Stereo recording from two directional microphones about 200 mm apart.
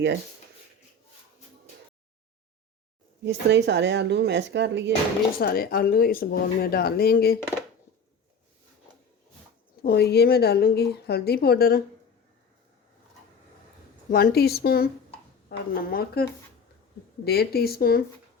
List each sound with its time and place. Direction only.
3.2 s speech: 60° right (ahead or behind)
5.4 s speech: 50° left (ahead or behind)
9.8 s speech: 55° left (ahead or behind)
14.1 s speech: 50° left (ahead or behind)